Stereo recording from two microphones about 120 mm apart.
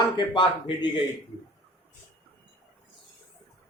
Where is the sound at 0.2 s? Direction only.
40° left (ahead or behind).